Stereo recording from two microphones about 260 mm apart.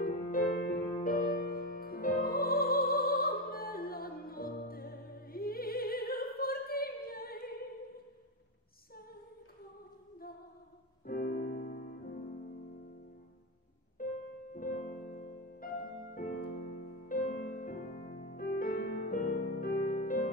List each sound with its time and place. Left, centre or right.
0.0 s music: left
11.1 s music: left
14.0 s music: left